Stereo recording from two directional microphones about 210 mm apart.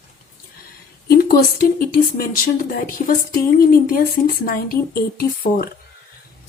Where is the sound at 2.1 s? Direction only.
45° left (ahead or behind).